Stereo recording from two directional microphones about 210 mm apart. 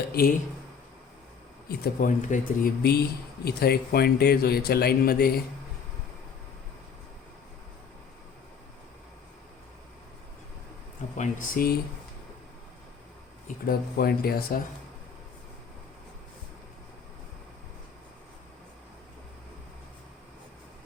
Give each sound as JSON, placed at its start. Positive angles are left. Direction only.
{"t": 0.1, "sound": "speech", "side_deg": 45}
{"t": 1.6, "sound": "speech", "side_deg": 45}
{"t": 11.2, "sound": "speech", "side_deg": 40}
{"t": 13.7, "sound": "speech", "side_deg": 45}